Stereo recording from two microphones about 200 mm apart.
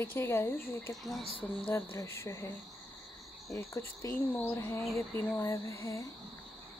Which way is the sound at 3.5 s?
15° left (ahead or behind).